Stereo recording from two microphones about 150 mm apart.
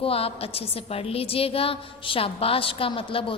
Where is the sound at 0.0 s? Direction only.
40° left (ahead or behind).